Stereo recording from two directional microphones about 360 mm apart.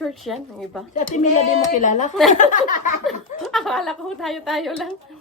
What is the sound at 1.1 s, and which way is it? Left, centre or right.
Speech, centre.